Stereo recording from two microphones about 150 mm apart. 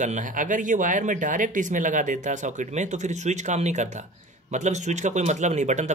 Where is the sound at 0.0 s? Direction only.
60° right (ahead or behind).